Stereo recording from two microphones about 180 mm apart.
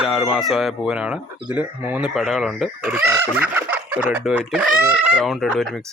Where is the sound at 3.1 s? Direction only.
10° right (ahead or behind).